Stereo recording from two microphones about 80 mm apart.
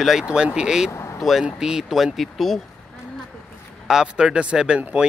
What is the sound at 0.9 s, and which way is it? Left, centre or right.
Vehicle, left.